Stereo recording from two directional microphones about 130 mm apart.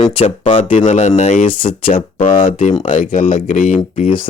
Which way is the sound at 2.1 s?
90° left.